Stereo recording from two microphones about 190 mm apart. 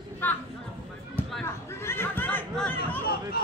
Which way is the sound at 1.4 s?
15° left (ahead or behind).